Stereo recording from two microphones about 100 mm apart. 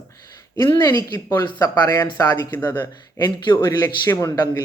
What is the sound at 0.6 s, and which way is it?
Speech, 45° left (ahead or behind).